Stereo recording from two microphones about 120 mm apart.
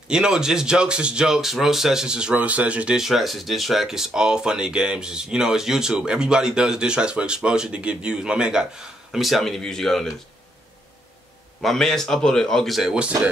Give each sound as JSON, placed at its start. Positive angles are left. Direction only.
{"t": 0.1, "sound": "speech", "side_deg": -5}
{"t": 11.6, "sound": "speech", "side_deg": 5}